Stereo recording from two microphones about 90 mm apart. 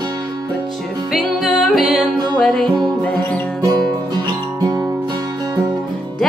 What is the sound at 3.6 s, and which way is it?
Music, 45° right (ahead or behind).